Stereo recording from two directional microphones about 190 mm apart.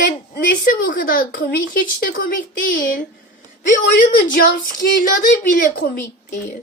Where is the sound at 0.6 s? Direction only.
50° left (ahead or behind).